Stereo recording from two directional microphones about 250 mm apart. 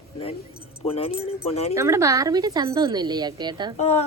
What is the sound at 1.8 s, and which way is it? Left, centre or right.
Speech, centre.